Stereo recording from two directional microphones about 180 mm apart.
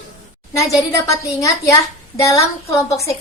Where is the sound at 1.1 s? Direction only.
15° left (ahead or behind).